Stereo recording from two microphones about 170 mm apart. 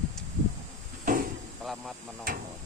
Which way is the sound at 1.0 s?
55° right (ahead or behind).